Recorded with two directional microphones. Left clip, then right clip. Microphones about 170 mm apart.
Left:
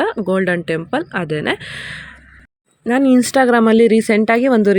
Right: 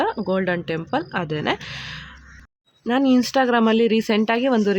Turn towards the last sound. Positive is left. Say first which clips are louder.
# left 6 dB
turn(degrees=25)  # may be behind; listen again after turning